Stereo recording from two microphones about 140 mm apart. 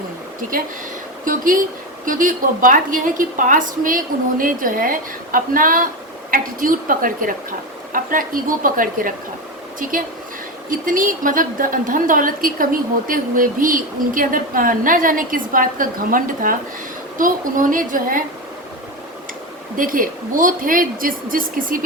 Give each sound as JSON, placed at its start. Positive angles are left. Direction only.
{"t": 1.2, "sound": "a woman's voice", "side_deg": -75}
{"t": 19.7, "sound": "a woman's voice", "side_deg": -80}